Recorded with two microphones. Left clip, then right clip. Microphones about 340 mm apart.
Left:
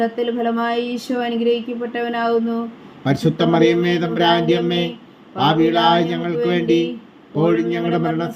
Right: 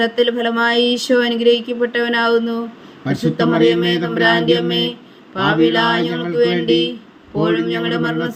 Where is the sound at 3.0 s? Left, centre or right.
Centre.